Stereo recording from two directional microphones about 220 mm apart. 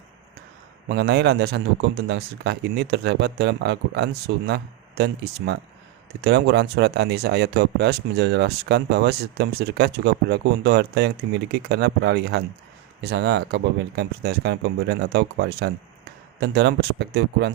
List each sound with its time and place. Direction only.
0.9 s speech: 50° right (ahead or behind)